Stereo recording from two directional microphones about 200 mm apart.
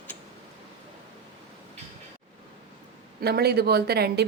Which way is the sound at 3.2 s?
50° right (ahead or behind).